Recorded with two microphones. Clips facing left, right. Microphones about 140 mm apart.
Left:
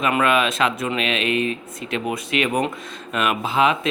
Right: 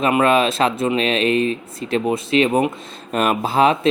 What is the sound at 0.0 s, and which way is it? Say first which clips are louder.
Speech: right 4 dB; 30° right (ahead or behind).